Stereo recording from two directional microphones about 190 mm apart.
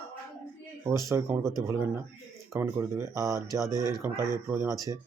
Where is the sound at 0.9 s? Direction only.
15° right (ahead or behind).